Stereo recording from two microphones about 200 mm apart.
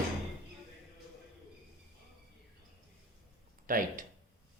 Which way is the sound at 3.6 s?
45° right (ahead or behind).